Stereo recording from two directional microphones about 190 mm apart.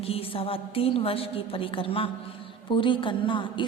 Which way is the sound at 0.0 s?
30° left (ahead or behind).